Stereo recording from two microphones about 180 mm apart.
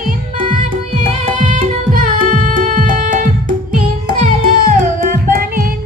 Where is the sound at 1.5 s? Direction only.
45° right (ahead or behind).